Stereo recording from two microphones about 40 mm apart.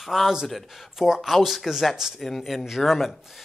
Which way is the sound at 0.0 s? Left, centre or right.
Centre.